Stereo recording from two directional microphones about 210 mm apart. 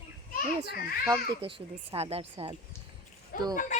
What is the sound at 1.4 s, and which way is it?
A woman's voice, 25° right (ahead or behind).